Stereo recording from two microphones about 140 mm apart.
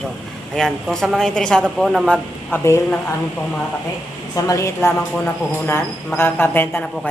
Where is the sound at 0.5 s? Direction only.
5° left (ahead or behind).